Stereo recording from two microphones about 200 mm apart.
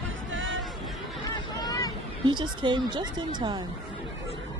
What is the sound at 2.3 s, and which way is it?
Speech, 25° right (ahead or behind).